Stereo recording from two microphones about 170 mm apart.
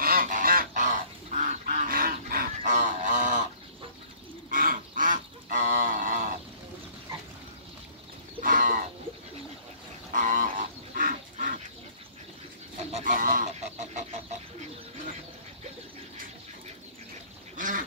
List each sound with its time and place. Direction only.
0.0 s goose: 55° right (ahead or behind)
4.5 s a sound: 55° right (ahead or behind)
8.4 s livestock: 50° right (ahead or behind)
10.1 s livestock: 50° right (ahead or behind)
12.9 s goose: 50° right (ahead or behind)
17.6 s duck: 50° right (ahead or behind)